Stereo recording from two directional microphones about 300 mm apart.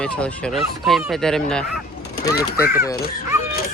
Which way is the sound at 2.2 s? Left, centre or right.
Centre.